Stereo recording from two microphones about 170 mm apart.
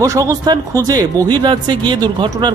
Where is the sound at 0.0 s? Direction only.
20° right (ahead or behind).